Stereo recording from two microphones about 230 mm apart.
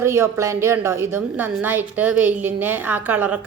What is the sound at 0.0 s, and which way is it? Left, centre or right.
Speech, centre.